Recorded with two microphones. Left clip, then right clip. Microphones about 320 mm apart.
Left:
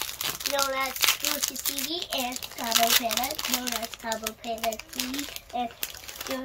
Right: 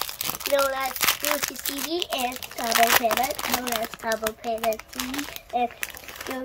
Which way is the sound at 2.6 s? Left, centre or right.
Centre.